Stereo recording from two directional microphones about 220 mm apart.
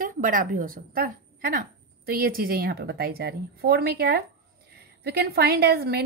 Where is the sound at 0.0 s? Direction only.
40° right (ahead or behind).